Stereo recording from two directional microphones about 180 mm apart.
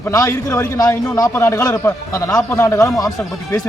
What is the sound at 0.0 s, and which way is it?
A man's voice, 15° left (ahead or behind).